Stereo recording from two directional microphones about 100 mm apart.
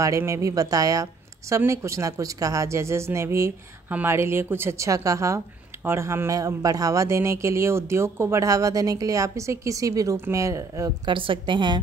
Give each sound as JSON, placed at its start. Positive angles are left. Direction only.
{"t": 0.0, "sound": "speech", "side_deg": -30}
{"t": 11.1, "sound": "a woman's voice", "side_deg": -55}